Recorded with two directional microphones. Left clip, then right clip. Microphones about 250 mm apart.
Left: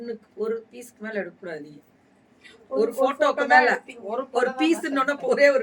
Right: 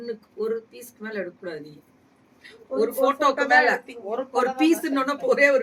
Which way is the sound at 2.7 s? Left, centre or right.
Centre.